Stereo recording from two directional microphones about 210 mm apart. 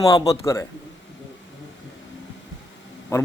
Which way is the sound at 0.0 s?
15° left (ahead or behind).